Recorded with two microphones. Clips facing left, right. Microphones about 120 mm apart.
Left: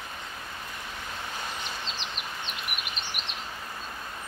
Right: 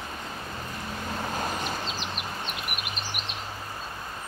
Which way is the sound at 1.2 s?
45° right (ahead or behind).